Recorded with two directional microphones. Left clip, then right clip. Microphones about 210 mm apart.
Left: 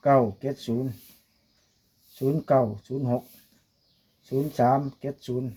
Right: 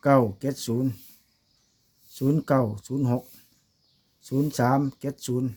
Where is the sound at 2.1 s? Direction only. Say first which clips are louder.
Left 2 dB; 45° right (ahead or behind).